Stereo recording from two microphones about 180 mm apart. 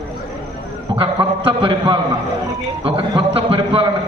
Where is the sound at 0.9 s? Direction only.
30° right (ahead or behind).